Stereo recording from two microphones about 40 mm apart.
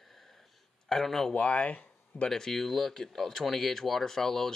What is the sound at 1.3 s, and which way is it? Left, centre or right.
Speech, left.